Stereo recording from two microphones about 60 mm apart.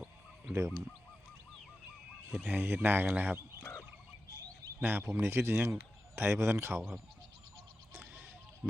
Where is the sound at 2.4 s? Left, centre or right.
Right.